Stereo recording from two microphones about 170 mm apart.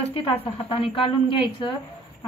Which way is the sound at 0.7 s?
35° left (ahead or behind).